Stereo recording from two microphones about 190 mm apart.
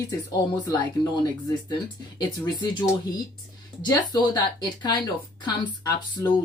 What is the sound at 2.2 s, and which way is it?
Speech, 25° left (ahead or behind).